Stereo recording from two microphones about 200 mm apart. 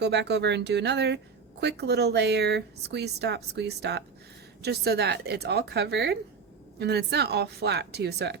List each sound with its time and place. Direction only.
0.0 s a woman's voice: 60° right (ahead or behind)